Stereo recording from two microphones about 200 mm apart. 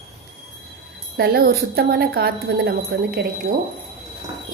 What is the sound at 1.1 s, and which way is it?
Speech, 50° right (ahead or behind).